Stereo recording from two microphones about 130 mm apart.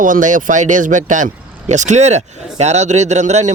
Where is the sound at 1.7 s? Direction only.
65° right (ahead or behind).